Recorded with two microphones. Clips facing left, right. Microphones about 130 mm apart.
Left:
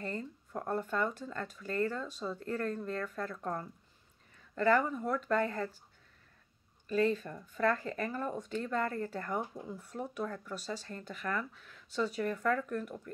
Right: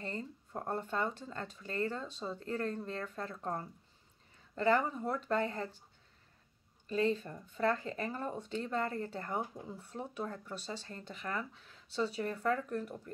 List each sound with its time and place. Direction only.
0.0 s speech: 25° right (ahead or behind)
6.9 s speech: 25° right (ahead or behind)